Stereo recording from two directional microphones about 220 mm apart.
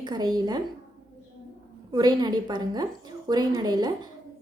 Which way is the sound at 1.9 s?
20° right (ahead or behind).